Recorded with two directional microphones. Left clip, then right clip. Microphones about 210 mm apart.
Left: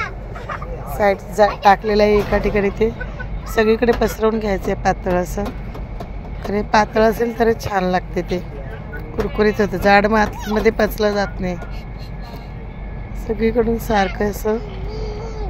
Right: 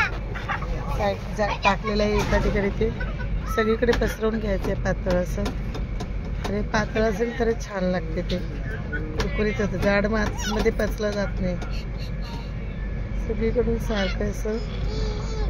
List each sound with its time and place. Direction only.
1.4 s speech: 40° left (ahead or behind)
6.5 s speech: 35° left (ahead or behind)
9.4 s speech: 40° left (ahead or behind)
13.4 s speech: 40° left (ahead or behind)